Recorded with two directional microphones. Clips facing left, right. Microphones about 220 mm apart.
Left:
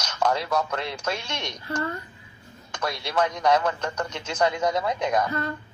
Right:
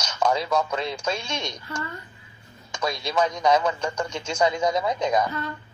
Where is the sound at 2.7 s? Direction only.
10° right (ahead or behind).